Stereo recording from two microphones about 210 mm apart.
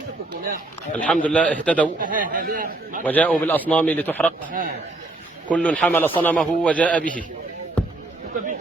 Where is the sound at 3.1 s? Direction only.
5° left (ahead or behind).